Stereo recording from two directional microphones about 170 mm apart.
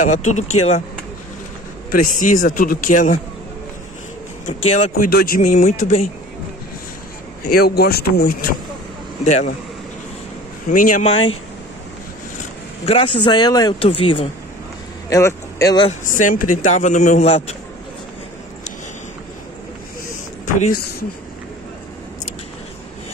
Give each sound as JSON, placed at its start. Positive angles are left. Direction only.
{"t": 0.0, "sound": "a man's voice", "side_deg": 45}
{"t": 1.9, "sound": "a man's voice", "side_deg": 50}
{"t": 4.5, "sound": "a man's voice", "side_deg": 40}
{"t": 5.4, "sound": "a man's voice", "side_deg": 40}
{"t": 7.4, "sound": "speech", "side_deg": 65}
{"t": 9.2, "sound": "a man's voice", "side_deg": 45}
{"t": 10.7, "sound": "a man's voice", "side_deg": 50}
{"t": 12.4, "sound": "speech", "side_deg": 35}
{"t": 15.0, "sound": "speech", "side_deg": 20}
{"t": 16.1, "sound": "a man's voice", "side_deg": 50}